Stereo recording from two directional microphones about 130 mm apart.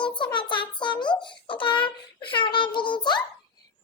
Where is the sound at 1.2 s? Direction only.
40° left (ahead or behind).